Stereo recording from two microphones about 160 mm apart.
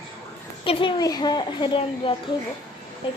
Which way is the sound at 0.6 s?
30° left (ahead or behind).